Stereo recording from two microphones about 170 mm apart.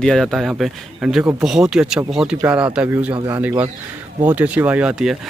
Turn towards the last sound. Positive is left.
turn(degrees=-5)  # may be behind; listen again after turning